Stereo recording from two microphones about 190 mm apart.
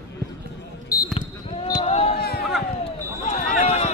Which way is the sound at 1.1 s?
30° left (ahead or behind).